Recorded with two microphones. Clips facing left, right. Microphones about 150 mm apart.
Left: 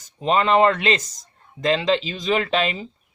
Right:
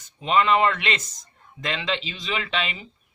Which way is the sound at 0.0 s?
35° left (ahead or behind).